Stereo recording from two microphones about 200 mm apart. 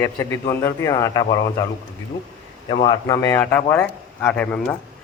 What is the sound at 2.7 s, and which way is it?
Speech, 25° left (ahead or behind).